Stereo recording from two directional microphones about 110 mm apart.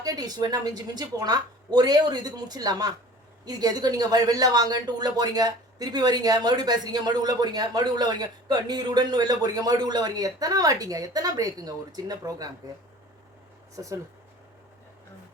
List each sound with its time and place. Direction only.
0.0 s speech: 35° right (ahead or behind)
13.7 s speech: 30° right (ahead or behind)